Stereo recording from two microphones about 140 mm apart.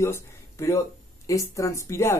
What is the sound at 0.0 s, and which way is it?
Speech, 20° left (ahead or behind).